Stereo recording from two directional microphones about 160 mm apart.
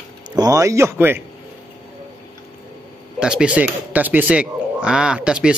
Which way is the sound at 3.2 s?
5° right (ahead or behind).